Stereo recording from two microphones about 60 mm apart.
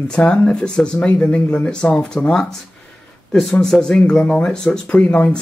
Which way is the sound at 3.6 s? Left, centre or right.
Centre.